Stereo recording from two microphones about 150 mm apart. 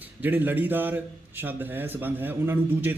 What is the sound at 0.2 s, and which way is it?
A man's voice, 10° right (ahead or behind).